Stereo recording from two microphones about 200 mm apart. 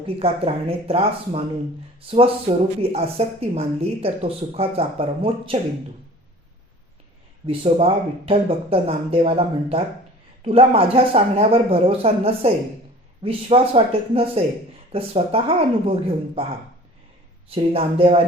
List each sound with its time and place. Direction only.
0.2 s speech: 30° right (ahead or behind)
7.4 s speech: 30° right (ahead or behind)
17.5 s speech: 30° right (ahead or behind)